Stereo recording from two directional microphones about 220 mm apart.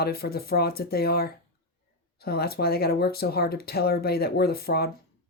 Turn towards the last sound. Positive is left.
turn(degrees=45)  # may be behind; listen again after turning